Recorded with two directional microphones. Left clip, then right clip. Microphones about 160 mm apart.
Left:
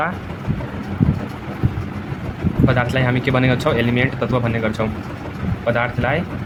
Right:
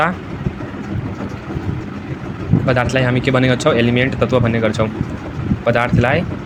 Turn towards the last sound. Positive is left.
turn(degrees=-20)  # may be behind; listen again after turning